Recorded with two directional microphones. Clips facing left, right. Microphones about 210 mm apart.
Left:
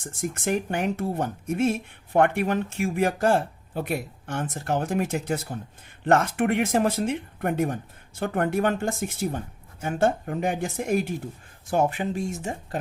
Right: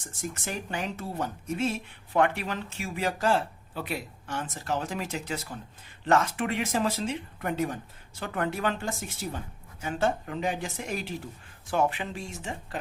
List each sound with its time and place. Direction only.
0.0 s speech: 55° left (ahead or behind)